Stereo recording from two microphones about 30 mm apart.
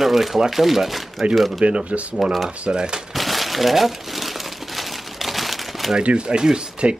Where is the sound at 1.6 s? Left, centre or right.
Right.